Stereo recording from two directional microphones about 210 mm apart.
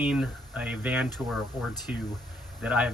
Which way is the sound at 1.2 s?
Centre (ahead or behind).